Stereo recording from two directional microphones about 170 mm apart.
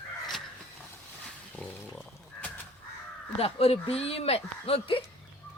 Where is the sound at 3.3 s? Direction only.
35° left (ahead or behind).